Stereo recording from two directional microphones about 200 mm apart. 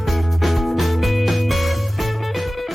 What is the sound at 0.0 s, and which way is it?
Music, centre (ahead or behind).